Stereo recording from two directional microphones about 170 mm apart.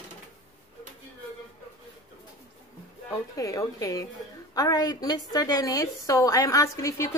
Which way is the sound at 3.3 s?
20° left (ahead or behind).